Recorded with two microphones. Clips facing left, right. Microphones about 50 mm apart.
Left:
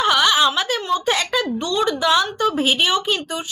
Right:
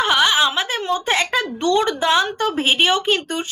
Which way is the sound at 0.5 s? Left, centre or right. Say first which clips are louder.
Even; right.